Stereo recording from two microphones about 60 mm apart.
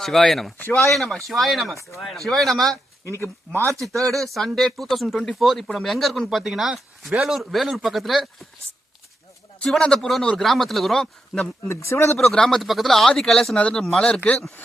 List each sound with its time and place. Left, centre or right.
0.0 s speech: centre
0.6 s speech: left
0.9 s speech: centre
3.0 s speech: left
4.0 s speech: centre
9.6 s speech: centre
11.3 s speech: centre
11.7 s speech: left
12.2 s speech: centre